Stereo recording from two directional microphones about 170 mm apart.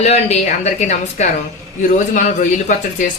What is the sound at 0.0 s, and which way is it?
A woman's voice, 40° left (ahead or behind).